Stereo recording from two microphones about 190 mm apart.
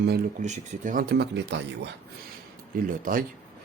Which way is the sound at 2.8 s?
50° right (ahead or behind).